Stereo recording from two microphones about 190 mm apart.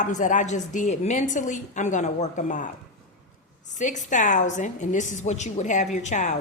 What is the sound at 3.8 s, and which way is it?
A woman's voice, 40° left (ahead or behind).